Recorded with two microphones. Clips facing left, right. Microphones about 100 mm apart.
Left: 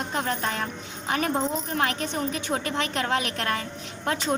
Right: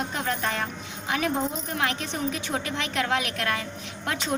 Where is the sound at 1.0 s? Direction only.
45° left (ahead or behind).